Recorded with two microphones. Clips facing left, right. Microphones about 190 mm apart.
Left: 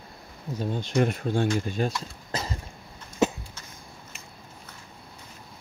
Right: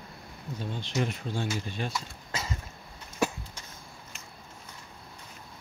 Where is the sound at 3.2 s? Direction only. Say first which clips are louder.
Left 5 dB; 20° left (ahead or behind).